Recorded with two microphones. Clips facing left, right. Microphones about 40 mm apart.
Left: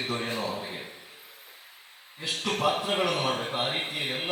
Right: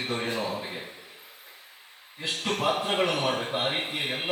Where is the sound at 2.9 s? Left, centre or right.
Right.